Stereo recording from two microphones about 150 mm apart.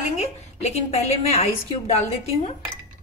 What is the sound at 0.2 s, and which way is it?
A woman's voice, 45° left (ahead or behind).